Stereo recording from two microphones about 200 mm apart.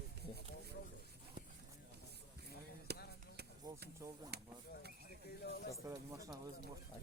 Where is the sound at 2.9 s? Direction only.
55° right (ahead or behind).